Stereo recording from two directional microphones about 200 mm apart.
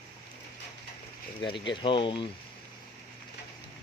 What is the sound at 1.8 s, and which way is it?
Speech, 25° left (ahead or behind).